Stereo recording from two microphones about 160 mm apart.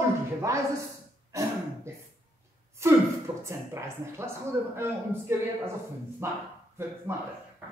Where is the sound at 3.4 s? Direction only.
15° right (ahead or behind).